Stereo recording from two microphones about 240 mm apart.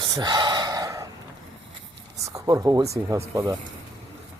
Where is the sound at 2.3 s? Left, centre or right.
Centre.